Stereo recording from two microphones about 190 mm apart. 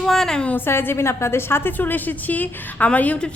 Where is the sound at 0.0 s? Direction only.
Centre (ahead or behind).